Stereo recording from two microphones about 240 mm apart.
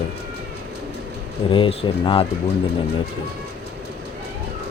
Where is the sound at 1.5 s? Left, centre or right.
Left.